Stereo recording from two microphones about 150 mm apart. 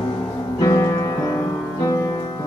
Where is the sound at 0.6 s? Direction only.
20° left (ahead or behind).